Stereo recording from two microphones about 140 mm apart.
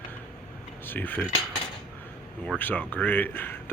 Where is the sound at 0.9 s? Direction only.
15° left (ahead or behind).